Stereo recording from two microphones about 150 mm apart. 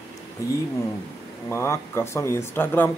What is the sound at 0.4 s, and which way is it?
A man's voice, 20° left (ahead or behind).